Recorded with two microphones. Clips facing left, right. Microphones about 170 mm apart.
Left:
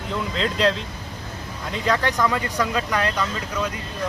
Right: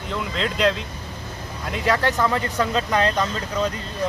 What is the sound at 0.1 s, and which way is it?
Speech, centre (ahead or behind).